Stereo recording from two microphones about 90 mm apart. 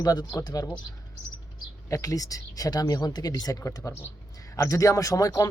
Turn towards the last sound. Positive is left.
turn(degrees=45)  # may be behind; listen again after turning